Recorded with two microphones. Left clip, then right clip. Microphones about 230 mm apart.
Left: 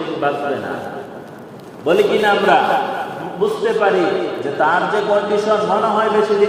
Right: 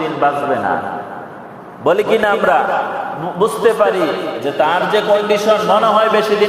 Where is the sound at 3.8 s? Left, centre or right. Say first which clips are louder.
Left 1 dB; right.